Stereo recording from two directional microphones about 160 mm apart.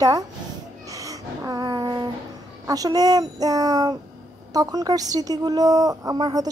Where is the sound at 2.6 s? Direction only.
25° right (ahead or behind).